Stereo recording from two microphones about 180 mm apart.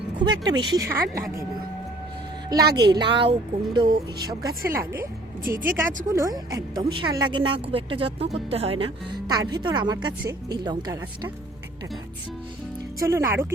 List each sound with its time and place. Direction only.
0.3 s speech: 25° right (ahead or behind)
2.6 s speech: 65° right (ahead or behind)
2.9 s speech: 25° right (ahead or behind)
13.0 s speech: 15° right (ahead or behind)